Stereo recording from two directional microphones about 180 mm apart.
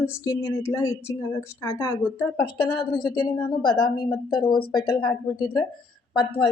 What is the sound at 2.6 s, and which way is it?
A woman's voice, 25° left (ahead or behind).